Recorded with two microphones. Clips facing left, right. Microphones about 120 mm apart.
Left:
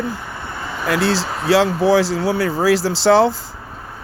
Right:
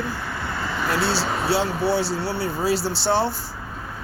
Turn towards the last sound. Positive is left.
turn(degrees=90)